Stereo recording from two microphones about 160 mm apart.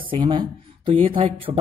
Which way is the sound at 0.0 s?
30° right (ahead or behind).